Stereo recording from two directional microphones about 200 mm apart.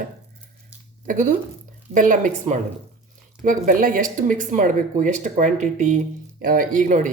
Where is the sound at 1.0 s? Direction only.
40° right (ahead or behind).